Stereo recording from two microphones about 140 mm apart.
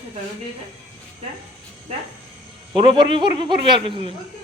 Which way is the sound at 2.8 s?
35° right (ahead or behind).